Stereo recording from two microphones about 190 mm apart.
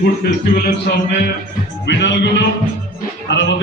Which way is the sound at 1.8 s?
65° left (ahead or behind).